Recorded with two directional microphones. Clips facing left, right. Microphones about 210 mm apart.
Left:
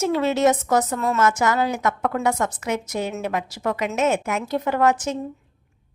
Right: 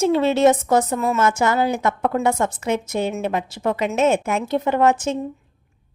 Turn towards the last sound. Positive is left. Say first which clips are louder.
# right 2 dB
turn(degrees=-25)  # may be behind; listen again after turning